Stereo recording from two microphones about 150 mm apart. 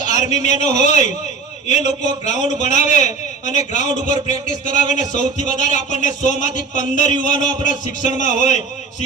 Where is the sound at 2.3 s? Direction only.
55° left (ahead or behind).